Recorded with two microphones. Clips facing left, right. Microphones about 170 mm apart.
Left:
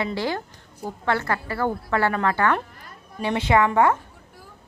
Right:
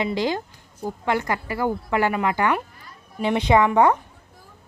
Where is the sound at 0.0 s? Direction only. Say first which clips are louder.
Right 2 dB; 15° right (ahead or behind).